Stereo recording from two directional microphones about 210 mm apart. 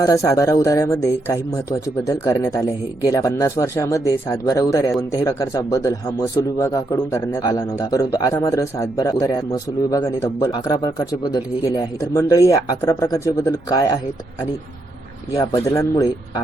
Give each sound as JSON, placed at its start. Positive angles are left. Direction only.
{"t": 0.0, "sound": "speech", "side_deg": 15}
{"t": 15.4, "sound": "speech", "side_deg": 15}